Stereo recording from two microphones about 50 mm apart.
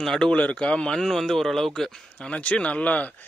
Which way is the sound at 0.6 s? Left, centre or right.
Centre.